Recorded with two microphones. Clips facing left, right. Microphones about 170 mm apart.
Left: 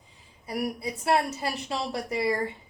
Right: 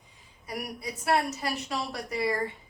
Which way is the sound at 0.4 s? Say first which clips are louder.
Left 6 dB; 30° left (ahead or behind).